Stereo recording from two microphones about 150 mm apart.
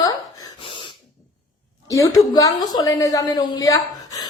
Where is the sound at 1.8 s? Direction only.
20° left (ahead or behind).